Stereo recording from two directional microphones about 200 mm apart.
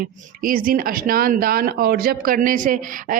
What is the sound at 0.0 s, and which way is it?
Speech, 45° right (ahead or behind).